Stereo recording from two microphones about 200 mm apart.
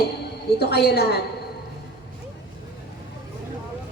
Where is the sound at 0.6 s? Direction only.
55° left (ahead or behind).